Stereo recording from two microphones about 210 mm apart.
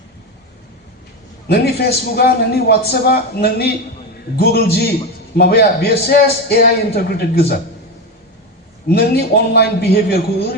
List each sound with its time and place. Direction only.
1.5 s a man's voice: 50° left (ahead or behind)
8.9 s a man's voice: 50° left (ahead or behind)